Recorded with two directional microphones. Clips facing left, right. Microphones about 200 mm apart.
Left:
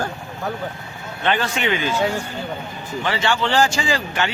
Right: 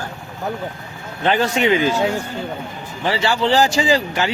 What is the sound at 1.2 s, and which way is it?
Speech, 35° right (ahead or behind).